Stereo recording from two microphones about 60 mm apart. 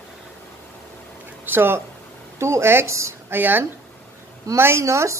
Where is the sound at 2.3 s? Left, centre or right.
Right.